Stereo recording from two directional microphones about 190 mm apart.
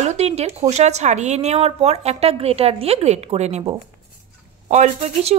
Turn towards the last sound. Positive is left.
turn(degrees=-40)  # may be behind; listen again after turning